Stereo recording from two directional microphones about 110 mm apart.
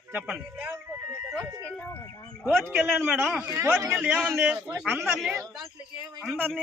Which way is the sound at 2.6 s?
20° right (ahead or behind).